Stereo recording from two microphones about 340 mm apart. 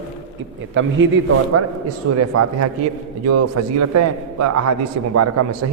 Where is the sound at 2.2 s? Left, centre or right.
Right.